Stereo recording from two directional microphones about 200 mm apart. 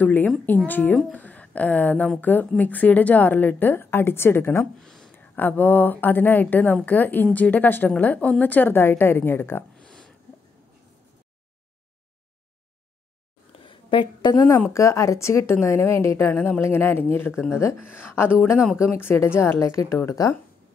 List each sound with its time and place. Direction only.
0.0 s a woman's voice: 10° left (ahead or behind)
13.5 s a sound: 25° left (ahead or behind)
14.6 s a woman's voice: 15° left (ahead or behind)